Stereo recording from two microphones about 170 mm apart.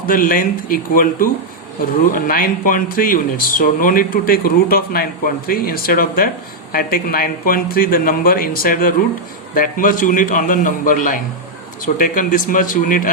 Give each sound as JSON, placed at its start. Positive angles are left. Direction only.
{"t": 0.1, "sound": "a man's voice", "side_deg": 55}